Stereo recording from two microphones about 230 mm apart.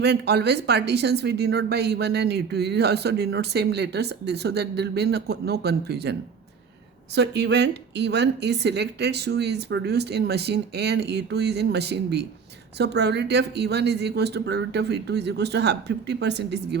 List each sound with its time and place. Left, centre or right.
0.0 s speech: right
7.2 s speech: right